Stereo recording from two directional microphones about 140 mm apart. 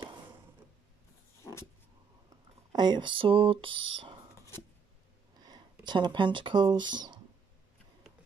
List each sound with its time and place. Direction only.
1.4 s dog: 20° left (ahead or behind)
2.2 s speech: 30° right (ahead or behind)
5.4 s speech: 30° right (ahead or behind)